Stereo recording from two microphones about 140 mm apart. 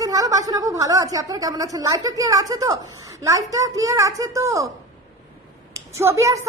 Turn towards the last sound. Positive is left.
turn(degrees=-20)  # may be behind; listen again after turning